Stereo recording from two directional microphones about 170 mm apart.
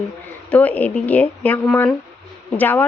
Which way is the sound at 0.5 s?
10° left (ahead or behind).